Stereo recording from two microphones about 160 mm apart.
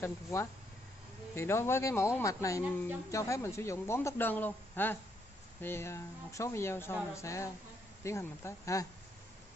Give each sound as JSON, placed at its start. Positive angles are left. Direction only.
{"t": 0.0, "sound": "speech", "side_deg": 15}